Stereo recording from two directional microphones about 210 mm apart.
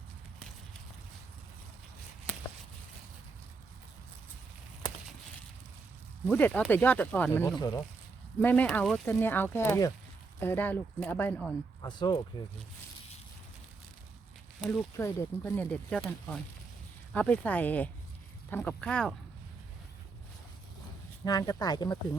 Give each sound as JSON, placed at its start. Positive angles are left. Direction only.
{"t": 6.2, "sound": "speech", "side_deg": 10}
{"t": 11.8, "sound": "speech", "side_deg": 20}
{"t": 14.9, "sound": "speech", "side_deg": 10}
{"t": 21.2, "sound": "speech", "side_deg": 15}